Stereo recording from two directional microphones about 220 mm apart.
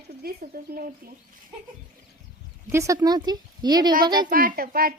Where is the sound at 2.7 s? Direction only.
15° right (ahead or behind).